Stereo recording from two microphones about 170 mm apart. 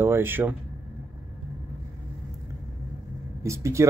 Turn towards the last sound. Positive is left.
turn(degrees=-15)  # may be behind; listen again after turning